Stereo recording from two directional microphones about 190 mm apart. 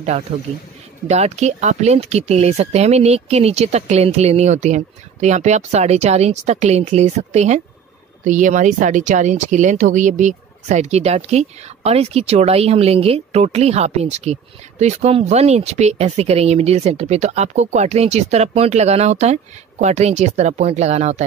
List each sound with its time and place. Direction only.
0.3 s speech: 30° right (ahead or behind)